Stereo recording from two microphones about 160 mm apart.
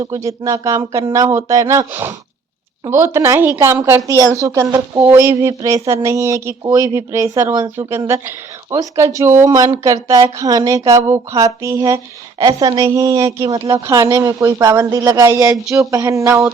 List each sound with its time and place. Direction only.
0.0 s speech: 20° right (ahead or behind)